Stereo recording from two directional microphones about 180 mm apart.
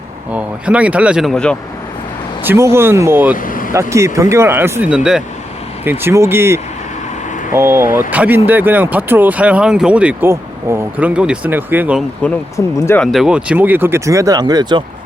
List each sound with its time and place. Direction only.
0.3 s speech: 5° right (ahead or behind)
2.4 s speech: 15° right (ahead or behind)
3.3 s vehicle: 50° left (ahead or behind)
3.7 s speech: 15° right (ahead or behind)
12.2 s speech: 15° left (ahead or behind)
13.0 s speech: centre (ahead or behind); by 14.8 s 25° right (ahead or behind)